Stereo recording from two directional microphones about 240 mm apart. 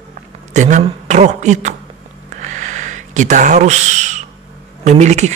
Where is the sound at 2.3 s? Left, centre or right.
Right.